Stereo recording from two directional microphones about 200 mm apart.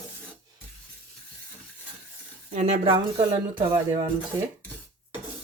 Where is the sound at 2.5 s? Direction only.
40° right (ahead or behind).